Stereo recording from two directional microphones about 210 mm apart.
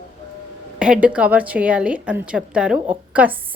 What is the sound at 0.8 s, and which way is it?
A woman's voice, 5° right (ahead or behind).